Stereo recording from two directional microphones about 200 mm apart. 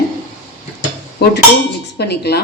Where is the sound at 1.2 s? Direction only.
55° left (ahead or behind).